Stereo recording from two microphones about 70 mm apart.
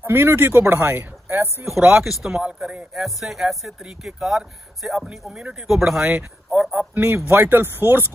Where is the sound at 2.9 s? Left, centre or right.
Centre.